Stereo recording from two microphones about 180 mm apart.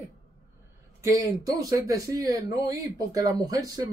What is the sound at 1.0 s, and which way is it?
Speech, 20° right (ahead or behind).